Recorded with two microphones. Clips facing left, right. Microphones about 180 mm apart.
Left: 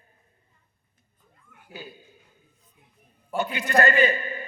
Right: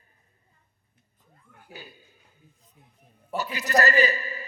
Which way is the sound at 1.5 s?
30° right (ahead or behind).